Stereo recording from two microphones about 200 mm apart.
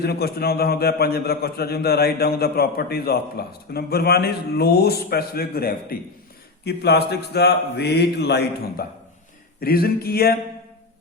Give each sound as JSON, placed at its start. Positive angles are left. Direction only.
{"t": 0.0, "sound": "a man's voice", "side_deg": 50}